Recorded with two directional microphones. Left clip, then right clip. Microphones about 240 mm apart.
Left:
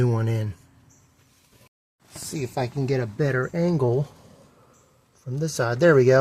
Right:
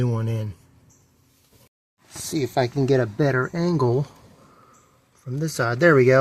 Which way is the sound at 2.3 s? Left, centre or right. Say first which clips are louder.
Right 6 dB; right.